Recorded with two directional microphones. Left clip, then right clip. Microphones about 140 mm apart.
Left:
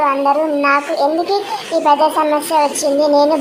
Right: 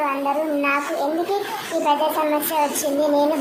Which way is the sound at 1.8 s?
15° left (ahead or behind).